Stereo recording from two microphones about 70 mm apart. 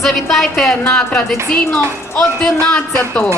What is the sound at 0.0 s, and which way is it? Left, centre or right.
Speech, centre.